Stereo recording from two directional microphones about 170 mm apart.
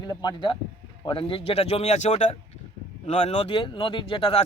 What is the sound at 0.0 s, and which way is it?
Speech, 25° left (ahead or behind).